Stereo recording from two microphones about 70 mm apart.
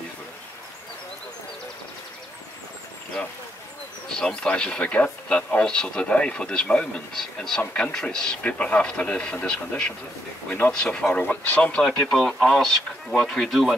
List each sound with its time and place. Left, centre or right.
4.1 s speech: centre
11.8 s speech: centre